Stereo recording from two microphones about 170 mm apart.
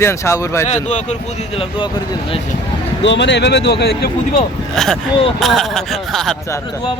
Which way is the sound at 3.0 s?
90° left.